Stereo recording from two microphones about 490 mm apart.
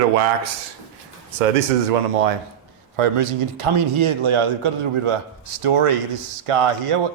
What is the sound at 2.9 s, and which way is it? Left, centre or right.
A man's voice, right.